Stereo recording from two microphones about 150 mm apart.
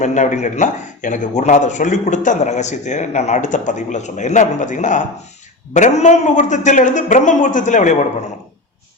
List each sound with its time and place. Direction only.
0.0 s a man's voice: 55° left (ahead or behind)